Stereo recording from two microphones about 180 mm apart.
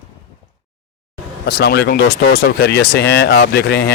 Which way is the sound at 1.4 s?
65° left (ahead or behind).